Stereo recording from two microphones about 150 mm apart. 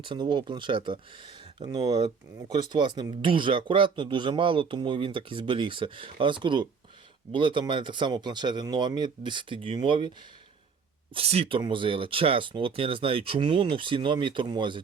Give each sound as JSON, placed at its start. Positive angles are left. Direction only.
{"t": 0.0, "sound": "speech", "side_deg": -30}